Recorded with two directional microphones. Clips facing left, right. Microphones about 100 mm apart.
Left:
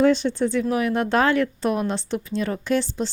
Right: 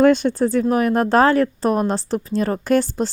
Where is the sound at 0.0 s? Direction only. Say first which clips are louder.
Right 4 dB; 50° right (ahead or behind).